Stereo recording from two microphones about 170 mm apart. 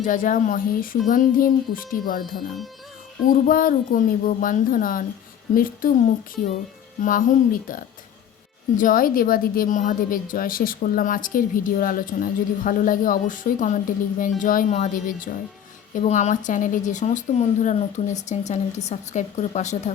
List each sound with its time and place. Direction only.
0.0 s a woman's voice: 50° left (ahead or behind)
3.4 s a woman's voice: 55° left (ahead or behind)
7.0 s a woman's voice: 50° left (ahead or behind)